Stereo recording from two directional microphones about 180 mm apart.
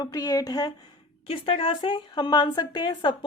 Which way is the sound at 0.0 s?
20° left (ahead or behind).